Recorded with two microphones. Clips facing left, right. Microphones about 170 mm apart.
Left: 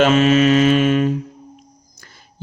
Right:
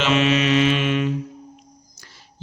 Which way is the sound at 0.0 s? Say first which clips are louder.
Left 6 dB; 45° left (ahead or behind).